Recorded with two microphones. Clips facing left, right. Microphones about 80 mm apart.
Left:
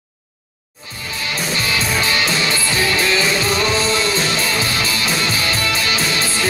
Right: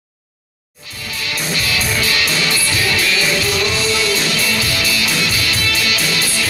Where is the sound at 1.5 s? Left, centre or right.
Left.